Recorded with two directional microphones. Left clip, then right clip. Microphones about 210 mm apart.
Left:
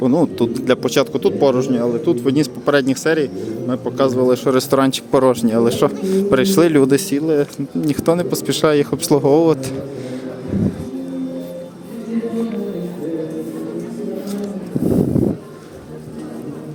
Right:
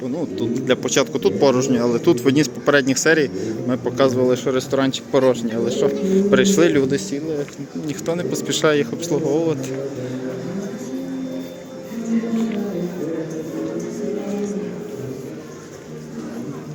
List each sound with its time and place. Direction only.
0.0 s a man's voice: 45° left (ahead or behind)
0.7 s a man's voice: 20° left (ahead or behind)
1.9 s a man's voice: centre (ahead or behind)
2.3 s a man's voice: 10° left (ahead or behind); by 7.4 s 40° left (ahead or behind)
7.9 s speech: 30° left (ahead or behind)